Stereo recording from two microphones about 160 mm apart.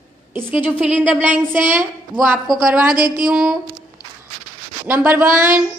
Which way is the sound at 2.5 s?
Centre (ahead or behind).